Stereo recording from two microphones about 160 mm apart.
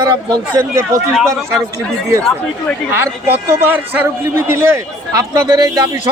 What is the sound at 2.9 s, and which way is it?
A man's voice, 15° right (ahead or behind).